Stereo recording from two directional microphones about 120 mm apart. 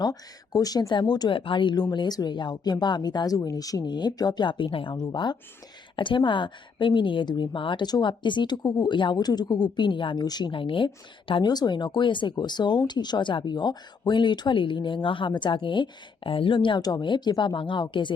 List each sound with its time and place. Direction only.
0.0 s a woman's voice: 30° left (ahead or behind)